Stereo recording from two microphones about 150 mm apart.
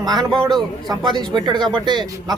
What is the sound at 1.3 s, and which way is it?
Speech, 30° right (ahead or behind).